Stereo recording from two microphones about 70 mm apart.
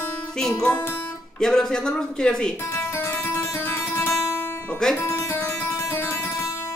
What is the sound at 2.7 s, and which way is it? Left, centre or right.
Music, left.